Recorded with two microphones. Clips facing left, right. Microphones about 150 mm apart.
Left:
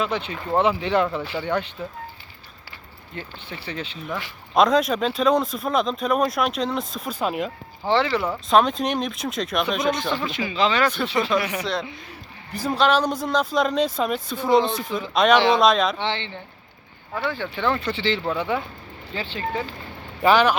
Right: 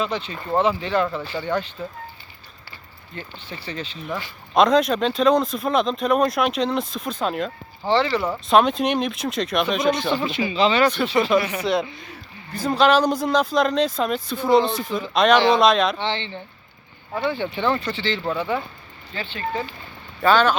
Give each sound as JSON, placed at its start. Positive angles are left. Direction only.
{"t": 0.3, "sound": "speech", "side_deg": 10}
{"t": 3.2, "sound": "speech", "side_deg": 5}
{"t": 8.3, "sound": "a man's voice", "side_deg": 0}
{"t": 12.5, "sound": "speech", "side_deg": 5}
{"t": 16.0, "sound": "speech", "side_deg": 10}
{"t": 17.2, "sound": "speech", "side_deg": -20}
{"t": 17.7, "sound": "speech", "side_deg": 10}
{"t": 20.2, "sound": "speech", "side_deg": 10}